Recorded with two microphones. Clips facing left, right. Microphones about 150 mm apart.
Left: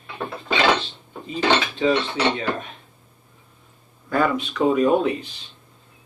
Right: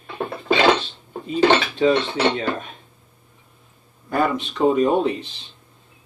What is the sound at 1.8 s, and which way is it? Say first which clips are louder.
Speech: right 2 dB; 45° right (ahead or behind).